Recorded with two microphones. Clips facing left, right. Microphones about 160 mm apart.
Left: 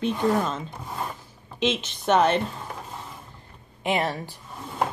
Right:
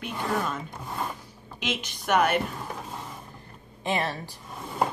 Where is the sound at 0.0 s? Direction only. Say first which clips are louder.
Left 6 dB; 25° left (ahead or behind).